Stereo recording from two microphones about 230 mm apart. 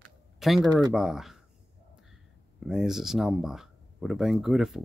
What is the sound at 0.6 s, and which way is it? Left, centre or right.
Speech, centre.